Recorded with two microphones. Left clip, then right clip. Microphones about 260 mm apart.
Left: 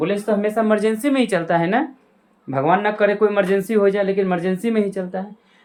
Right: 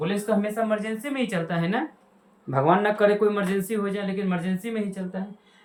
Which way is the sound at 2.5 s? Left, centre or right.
Centre.